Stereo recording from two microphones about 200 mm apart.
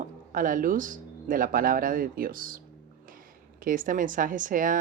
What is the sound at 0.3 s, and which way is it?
Speech, 40° right (ahead or behind).